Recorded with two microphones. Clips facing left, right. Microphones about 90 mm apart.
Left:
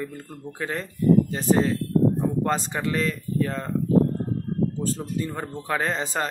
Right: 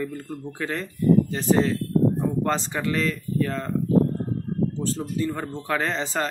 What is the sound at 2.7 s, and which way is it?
Speech, 30° left (ahead or behind).